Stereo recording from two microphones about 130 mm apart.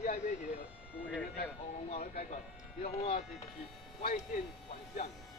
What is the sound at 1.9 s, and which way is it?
Speech, 55° left (ahead or behind).